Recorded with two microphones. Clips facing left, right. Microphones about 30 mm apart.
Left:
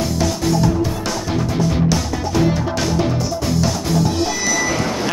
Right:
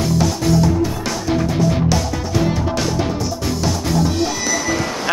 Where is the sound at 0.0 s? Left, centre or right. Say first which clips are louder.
Right 1 dB; centre.